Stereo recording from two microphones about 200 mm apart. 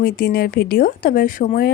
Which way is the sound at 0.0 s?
45° left (ahead or behind).